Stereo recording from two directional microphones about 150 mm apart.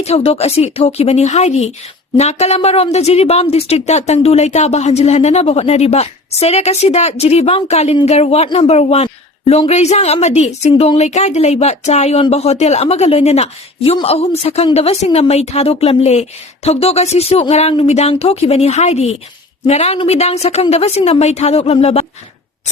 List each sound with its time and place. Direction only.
0.0 s speech: 45° left (ahead or behind)